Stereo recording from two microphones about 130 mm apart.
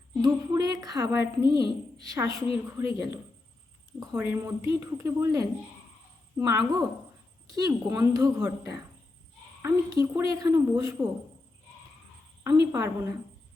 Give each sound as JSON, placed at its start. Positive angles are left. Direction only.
{"t": 0.2, "sound": "a woman's voice", "side_deg": -30}
{"t": 12.4, "sound": "a woman's voice", "side_deg": -25}